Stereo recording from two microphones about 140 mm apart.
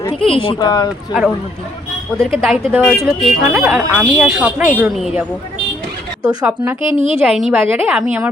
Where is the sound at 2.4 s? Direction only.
5° right (ahead or behind).